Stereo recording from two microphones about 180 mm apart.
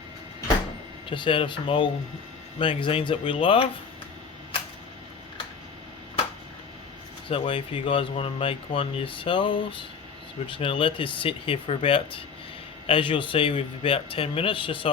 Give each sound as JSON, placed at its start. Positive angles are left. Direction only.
{"t": 1.1, "sound": "a man's voice", "side_deg": 30}
{"t": 7.3, "sound": "a man's voice", "side_deg": 30}